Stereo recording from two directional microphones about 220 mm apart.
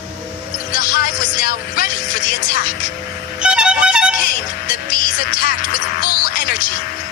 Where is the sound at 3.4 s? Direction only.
5° right (ahead or behind).